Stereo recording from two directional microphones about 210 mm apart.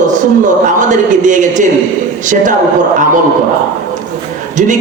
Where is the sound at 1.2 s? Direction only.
35° right (ahead or behind).